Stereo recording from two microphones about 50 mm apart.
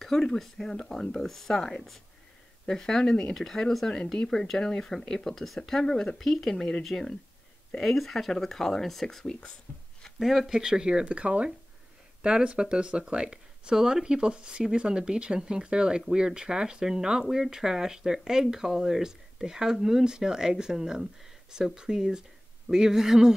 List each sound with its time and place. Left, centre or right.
0.0 s speech: centre
6.5 s speech: centre
7.8 s speech: centre
9.7 s speech: left
10.1 s speech: centre
10.6 s speech: centre